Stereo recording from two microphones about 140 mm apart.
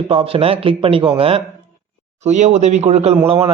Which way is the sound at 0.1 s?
40° right (ahead or behind).